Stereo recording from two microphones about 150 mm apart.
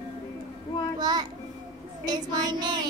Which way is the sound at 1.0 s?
25° right (ahead or behind).